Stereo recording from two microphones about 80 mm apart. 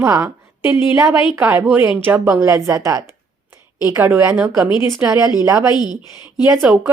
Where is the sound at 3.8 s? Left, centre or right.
Right.